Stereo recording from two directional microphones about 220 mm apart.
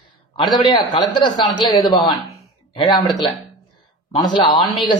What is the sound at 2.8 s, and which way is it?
A man's voice, 20° left (ahead or behind).